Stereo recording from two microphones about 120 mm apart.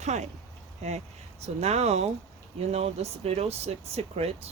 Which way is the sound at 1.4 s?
65° right (ahead or behind).